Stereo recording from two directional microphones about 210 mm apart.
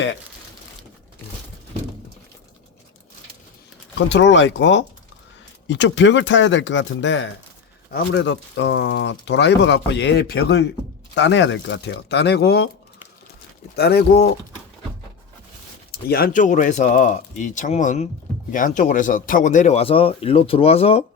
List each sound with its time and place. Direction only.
3.9 s speech: 60° left (ahead or behind)
7.9 s speech: 50° left (ahead or behind)
13.7 s speech: 50° left (ahead or behind)
15.9 s speech: 45° left (ahead or behind); by 21.0 s 30° left (ahead or behind)